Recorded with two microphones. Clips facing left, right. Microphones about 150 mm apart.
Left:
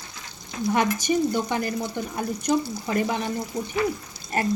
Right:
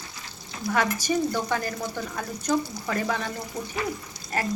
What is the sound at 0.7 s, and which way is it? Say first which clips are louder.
Speech: left 2 dB; 20° left (ahead or behind).